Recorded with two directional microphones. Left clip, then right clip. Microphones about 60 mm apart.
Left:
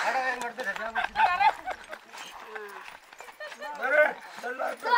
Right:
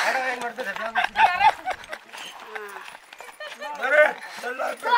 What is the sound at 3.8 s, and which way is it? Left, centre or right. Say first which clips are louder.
Clip-clop: right 5 dB; right.